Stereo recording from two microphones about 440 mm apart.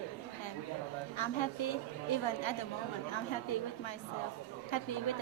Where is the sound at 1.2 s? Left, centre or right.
Left.